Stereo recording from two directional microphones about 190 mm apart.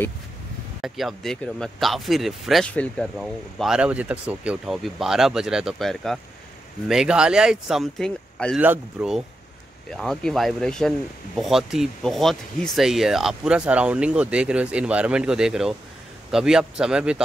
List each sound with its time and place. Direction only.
0.8 s speech: centre (ahead or behind)